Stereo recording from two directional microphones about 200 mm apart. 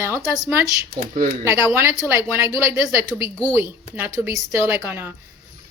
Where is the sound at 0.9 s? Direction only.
45° right (ahead or behind).